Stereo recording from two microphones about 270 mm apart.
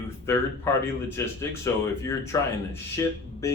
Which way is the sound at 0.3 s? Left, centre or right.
Centre.